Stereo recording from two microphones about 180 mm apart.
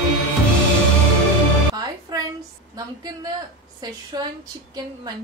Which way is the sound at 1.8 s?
20° right (ahead or behind).